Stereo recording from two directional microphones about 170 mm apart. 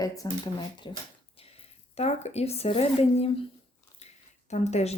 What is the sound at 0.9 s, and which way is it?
A woman's voice, 30° left (ahead or behind).